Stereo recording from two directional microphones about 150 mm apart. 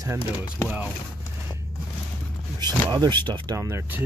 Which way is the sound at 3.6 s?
20° right (ahead or behind).